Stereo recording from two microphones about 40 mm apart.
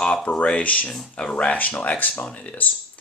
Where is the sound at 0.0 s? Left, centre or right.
Left.